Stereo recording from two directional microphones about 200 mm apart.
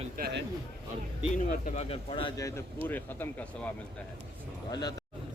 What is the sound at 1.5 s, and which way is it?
Speech, 35° left (ahead or behind).